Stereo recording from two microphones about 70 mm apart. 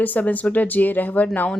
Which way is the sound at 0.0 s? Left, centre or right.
Left.